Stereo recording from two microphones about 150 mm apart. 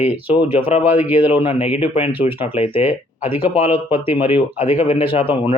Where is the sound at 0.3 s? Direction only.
35° left (ahead or behind).